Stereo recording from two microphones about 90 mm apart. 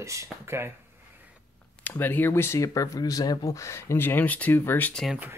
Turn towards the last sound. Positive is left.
turn(degrees=20)  # may be behind; listen again after turning